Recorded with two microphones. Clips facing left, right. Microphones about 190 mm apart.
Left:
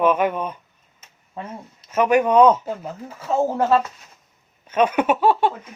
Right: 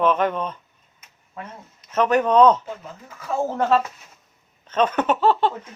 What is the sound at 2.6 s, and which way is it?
Speech, 40° left (ahead or behind).